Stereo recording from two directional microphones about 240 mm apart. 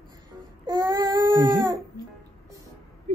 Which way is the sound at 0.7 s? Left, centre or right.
Centre.